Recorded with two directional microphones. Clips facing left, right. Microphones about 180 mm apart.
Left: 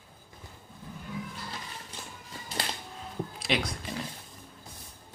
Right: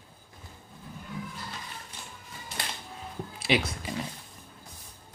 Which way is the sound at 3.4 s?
5° right (ahead or behind).